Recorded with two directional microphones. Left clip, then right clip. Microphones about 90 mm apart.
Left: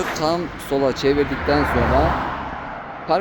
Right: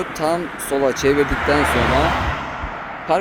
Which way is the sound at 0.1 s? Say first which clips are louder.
Right 1 dB; 20° right (ahead or behind).